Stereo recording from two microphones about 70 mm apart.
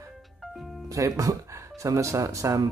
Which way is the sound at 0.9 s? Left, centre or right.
Right.